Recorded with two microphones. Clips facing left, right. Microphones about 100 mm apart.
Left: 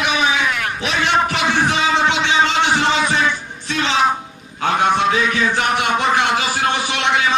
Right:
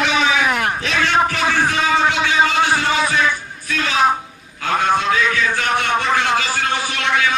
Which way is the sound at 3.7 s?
25° left (ahead or behind).